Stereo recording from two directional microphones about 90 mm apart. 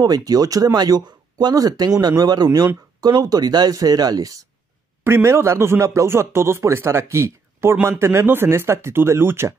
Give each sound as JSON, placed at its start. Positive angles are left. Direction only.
{"t": 0.0, "sound": "speech", "side_deg": -45}
{"t": 5.0, "sound": "speech", "side_deg": -30}